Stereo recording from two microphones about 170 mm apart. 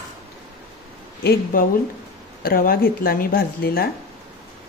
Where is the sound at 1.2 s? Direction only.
55° left (ahead or behind).